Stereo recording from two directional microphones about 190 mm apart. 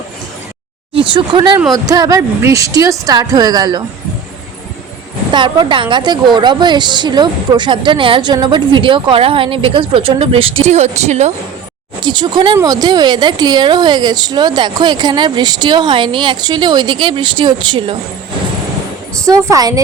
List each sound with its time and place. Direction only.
0.9 s a woman's voice: 25° right (ahead or behind)
5.3 s a woman's voice: 25° right (ahead or behind)
12.0 s a woman's voice: 25° right (ahead or behind)
19.5 s a woman's voice: 20° right (ahead or behind)